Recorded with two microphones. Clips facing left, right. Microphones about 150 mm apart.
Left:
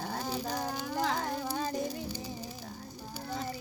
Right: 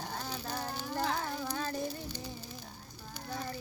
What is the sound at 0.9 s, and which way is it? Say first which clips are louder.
Child singing: left 2 dB; 10° left (ahead or behind).